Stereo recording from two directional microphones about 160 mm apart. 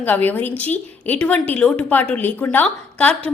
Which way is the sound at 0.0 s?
10° left (ahead or behind).